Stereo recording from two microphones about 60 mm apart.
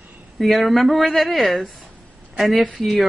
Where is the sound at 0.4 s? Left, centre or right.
Centre.